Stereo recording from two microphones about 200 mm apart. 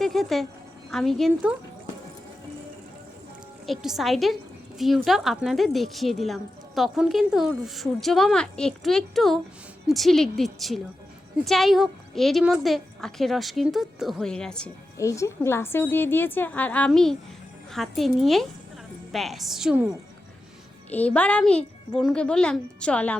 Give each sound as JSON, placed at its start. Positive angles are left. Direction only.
{"t": 0.0, "sound": "music", "side_deg": 0}
{"t": 0.9, "sound": "a woman's voice", "side_deg": 0}
{"t": 3.7, "sound": "a woman's voice", "side_deg": 0}
{"t": 14.9, "sound": "a woman's voice", "side_deg": 15}
{"t": 20.9, "sound": "a woman's voice", "side_deg": 5}